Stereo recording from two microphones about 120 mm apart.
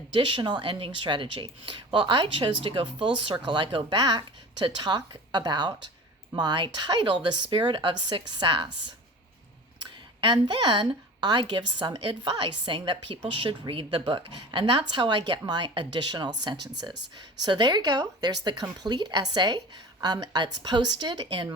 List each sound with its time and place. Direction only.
0.1 s a woman's voice: 40° right (ahead or behind)
10.2 s a woman's voice: 40° right (ahead or behind)